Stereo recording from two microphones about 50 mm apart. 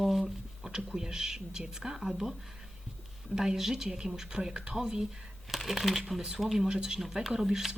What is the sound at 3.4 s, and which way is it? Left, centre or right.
Speech, centre.